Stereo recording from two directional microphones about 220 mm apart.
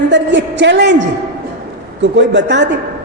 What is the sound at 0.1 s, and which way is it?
A man's voice, 55° right (ahead or behind).